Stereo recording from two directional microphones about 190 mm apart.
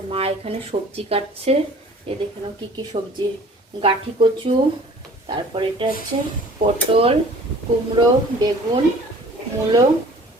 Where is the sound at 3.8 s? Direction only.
25° right (ahead or behind).